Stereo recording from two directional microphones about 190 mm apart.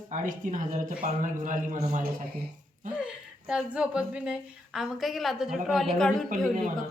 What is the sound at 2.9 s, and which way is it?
A woman's voice, 5° right (ahead or behind).